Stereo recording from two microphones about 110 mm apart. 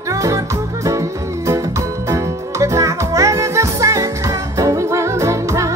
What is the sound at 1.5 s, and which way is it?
Music, 25° right (ahead or behind).